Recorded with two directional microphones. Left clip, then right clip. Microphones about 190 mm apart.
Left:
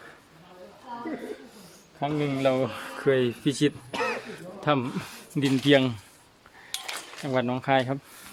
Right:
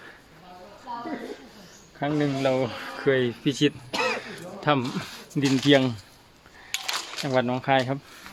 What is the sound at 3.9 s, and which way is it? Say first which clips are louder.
Throat clearing: right 3 dB; 45° right (ahead or behind).